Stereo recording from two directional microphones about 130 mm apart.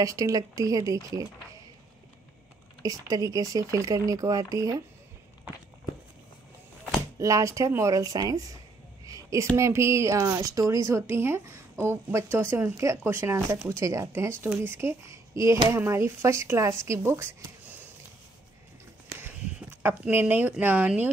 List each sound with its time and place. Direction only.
0.0 s speech: 25° right (ahead or behind)
2.8 s speech: 25° right (ahead or behind)
7.2 s speech: 25° right (ahead or behind)
9.0 s a sound: 25° right (ahead or behind)
9.6 s speech: 20° right (ahead or behind)
19.1 s speech: 15° right (ahead or behind)